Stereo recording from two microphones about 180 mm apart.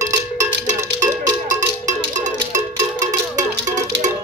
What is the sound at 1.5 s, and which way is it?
Music, 45° right (ahead or behind).